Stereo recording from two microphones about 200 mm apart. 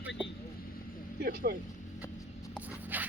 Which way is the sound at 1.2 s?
50° right (ahead or behind).